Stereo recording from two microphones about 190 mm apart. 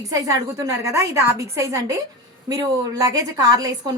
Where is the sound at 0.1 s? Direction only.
15° right (ahead or behind).